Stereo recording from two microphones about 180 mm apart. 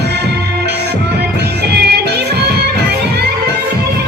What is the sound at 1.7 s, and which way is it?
Music, 65° right (ahead or behind).